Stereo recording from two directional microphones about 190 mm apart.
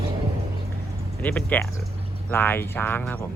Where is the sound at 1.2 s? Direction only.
10° left (ahead or behind).